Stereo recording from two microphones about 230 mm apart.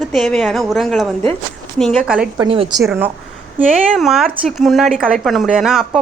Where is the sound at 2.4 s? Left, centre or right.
Right.